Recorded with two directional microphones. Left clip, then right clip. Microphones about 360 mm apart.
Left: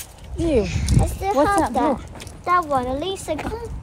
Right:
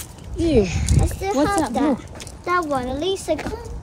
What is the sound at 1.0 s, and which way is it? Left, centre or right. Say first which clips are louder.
A woman's voice: left 2 dB; centre.